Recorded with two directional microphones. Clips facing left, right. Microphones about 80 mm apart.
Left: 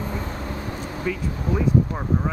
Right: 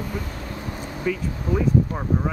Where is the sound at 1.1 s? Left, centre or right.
Centre.